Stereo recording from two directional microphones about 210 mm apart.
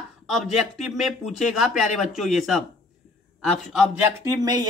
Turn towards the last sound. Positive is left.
turn(degrees=-20)  # may be behind; listen again after turning